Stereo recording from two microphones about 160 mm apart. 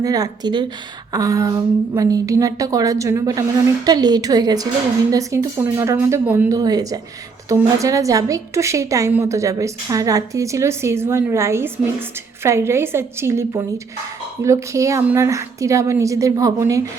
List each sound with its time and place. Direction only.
0.0 s a woman's voice: 25° right (ahead or behind)